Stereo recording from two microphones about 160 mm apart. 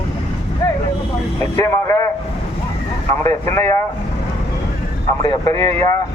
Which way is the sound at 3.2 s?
15° left (ahead or behind).